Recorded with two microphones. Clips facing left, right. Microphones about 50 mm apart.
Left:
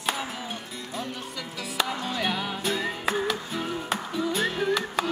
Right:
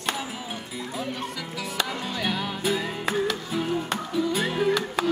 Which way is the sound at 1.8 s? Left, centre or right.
Centre.